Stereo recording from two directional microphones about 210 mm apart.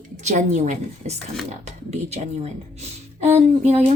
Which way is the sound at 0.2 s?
35° right (ahead or behind).